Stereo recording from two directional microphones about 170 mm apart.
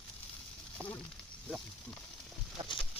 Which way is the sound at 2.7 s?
30° left (ahead or behind).